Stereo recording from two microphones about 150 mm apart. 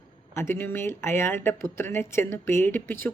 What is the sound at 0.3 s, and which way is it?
Speech, 15° left (ahead or behind).